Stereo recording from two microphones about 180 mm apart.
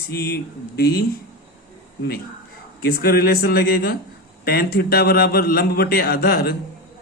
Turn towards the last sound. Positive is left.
turn(degrees=60)  # may be behind; listen again after turning